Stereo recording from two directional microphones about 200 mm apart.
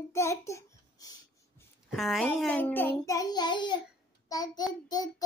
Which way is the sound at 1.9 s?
Centre (ahead or behind).